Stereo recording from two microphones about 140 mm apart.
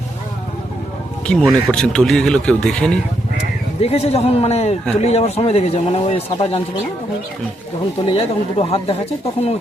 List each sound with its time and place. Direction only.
1.3 s speech: 5° left (ahead or behind)
3.8 s speech: 45° left (ahead or behind)
8.0 s speech: 45° left (ahead or behind)